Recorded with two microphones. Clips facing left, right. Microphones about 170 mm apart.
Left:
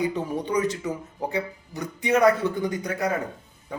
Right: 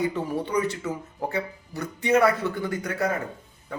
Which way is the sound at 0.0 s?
15° left (ahead or behind).